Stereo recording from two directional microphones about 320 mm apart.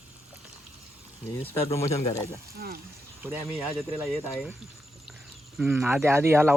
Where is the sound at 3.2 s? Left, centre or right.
Centre.